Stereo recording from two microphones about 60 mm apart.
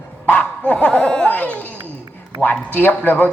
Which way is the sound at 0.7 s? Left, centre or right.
Centre.